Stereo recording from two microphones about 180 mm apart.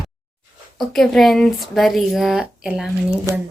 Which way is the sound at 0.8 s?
Centre (ahead or behind).